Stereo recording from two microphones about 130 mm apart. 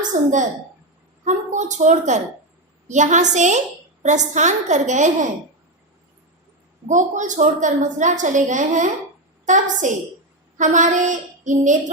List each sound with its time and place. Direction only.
0.1 s a child's voice: 70° right (ahead or behind)
6.8 s a woman's voice: 70° right (ahead or behind)